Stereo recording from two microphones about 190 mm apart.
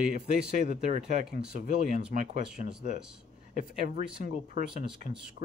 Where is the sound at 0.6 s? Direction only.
40° right (ahead or behind).